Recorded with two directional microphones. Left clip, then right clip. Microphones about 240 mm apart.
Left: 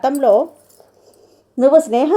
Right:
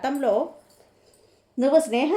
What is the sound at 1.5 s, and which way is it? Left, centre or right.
Speech, left.